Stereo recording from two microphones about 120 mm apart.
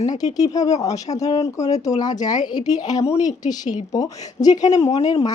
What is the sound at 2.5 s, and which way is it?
Speech, 35° left (ahead or behind).